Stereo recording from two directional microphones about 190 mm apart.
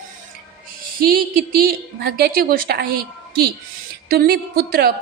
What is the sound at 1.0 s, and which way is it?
A woman's voice, 50° right (ahead or behind).